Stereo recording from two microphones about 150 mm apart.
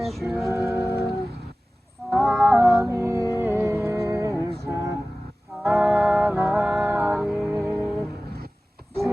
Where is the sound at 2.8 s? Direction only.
20° right (ahead or behind).